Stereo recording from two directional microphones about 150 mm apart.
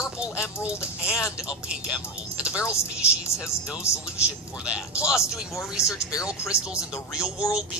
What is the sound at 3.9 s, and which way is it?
Speech, 20° left (ahead or behind).